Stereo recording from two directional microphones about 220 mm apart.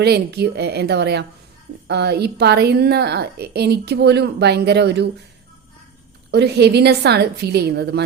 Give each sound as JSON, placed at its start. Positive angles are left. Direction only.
{"t": 0.0, "sound": "a woman's voice", "side_deg": -50}
{"t": 6.3, "sound": "a woman's voice", "side_deg": -50}